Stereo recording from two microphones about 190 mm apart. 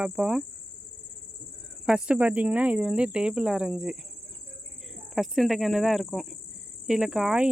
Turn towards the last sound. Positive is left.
turn(degrees=-5)  # may be behind; listen again after turning